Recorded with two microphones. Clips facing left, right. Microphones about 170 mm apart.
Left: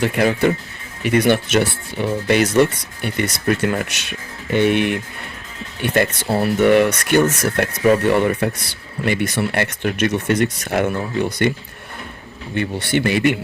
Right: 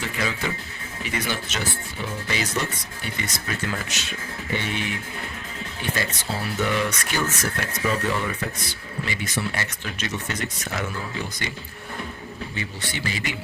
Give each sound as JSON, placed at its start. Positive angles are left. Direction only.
{"t": 0.0, "sound": "speech", "side_deg": 60}
{"t": 12.5, "sound": "speech", "side_deg": 60}